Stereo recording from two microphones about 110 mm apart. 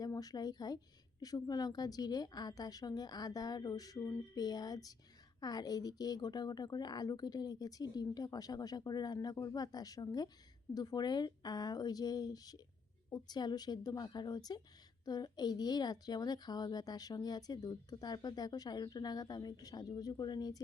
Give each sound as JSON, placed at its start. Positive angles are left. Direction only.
{"t": 0.0, "sound": "speech", "side_deg": 35}